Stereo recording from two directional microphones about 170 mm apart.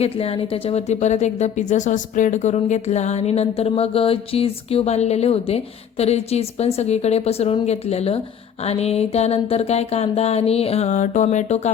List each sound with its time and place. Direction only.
0.0 s speech: 35° left (ahead or behind)